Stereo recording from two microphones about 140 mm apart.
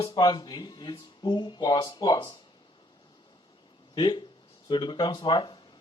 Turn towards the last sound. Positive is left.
turn(degrees=30)  # may be behind; listen again after turning